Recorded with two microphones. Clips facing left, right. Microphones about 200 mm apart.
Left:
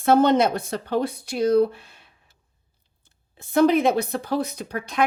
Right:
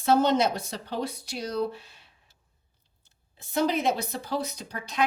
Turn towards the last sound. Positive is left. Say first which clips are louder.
# left 6 dB
turn(degrees=55)  # may be behind; listen again after turning